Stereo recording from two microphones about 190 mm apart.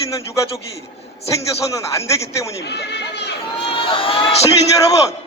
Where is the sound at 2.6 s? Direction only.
60° left (ahead or behind).